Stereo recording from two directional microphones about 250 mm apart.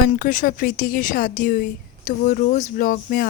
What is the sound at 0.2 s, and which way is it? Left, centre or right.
A woman's voice, left.